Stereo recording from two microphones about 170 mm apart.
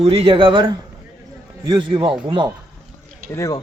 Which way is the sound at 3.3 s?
20° left (ahead or behind).